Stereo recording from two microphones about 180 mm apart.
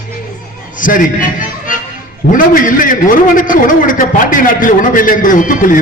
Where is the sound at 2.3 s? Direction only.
50° left (ahead or behind).